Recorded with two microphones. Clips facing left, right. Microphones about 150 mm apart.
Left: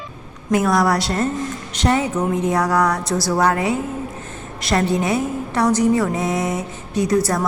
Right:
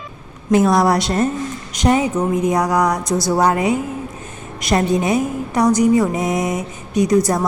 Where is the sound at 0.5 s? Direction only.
25° right (ahead or behind).